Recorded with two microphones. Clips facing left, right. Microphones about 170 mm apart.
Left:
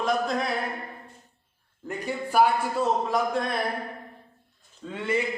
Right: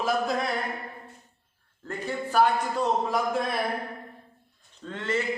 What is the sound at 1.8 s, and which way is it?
Speech, 15° left (ahead or behind).